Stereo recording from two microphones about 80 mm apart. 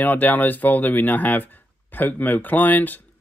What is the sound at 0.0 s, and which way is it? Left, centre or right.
Speech, left.